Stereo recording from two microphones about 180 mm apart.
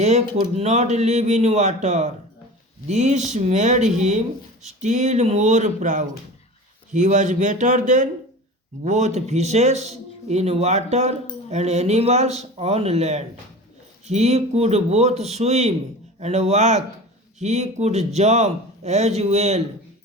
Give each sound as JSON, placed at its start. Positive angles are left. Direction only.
{"t": 0.0, "sound": "speech", "side_deg": -40}